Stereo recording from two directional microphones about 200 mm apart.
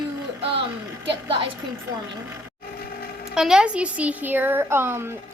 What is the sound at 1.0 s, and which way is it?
Speech, 25° right (ahead or behind).